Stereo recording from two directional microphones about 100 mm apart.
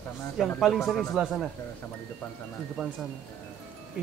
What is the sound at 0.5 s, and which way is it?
Speech, centre (ahead or behind).